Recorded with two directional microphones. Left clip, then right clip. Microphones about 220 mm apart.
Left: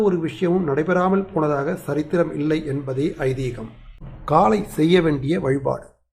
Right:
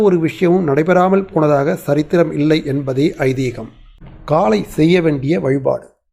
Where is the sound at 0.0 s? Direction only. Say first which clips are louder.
Right 7 dB; 20° right (ahead or behind).